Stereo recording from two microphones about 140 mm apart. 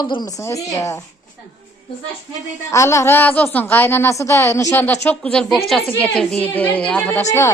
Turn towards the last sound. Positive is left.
turn(degrees=20)  # may be behind; listen again after turning